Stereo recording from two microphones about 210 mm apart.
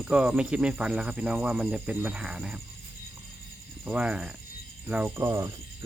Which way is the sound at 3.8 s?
5° right (ahead or behind).